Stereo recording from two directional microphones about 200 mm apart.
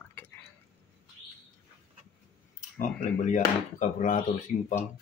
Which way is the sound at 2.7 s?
40° left (ahead or behind).